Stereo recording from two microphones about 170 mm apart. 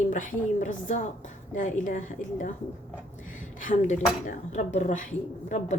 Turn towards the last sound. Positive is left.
turn(degrees=45)  # may be behind; listen again after turning